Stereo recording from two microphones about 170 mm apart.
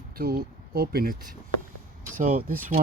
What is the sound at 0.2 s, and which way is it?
Speech, 65° right (ahead or behind).